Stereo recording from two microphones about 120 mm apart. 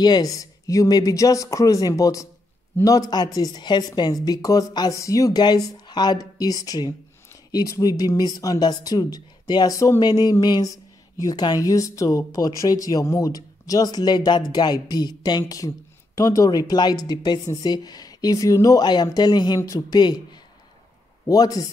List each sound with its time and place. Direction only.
0.0 s a woman's voice: 35° left (ahead or behind)